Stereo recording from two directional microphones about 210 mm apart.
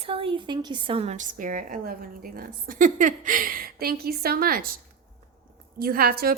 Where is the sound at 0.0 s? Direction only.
25° right (ahead or behind); by 4.8 s 45° right (ahead or behind).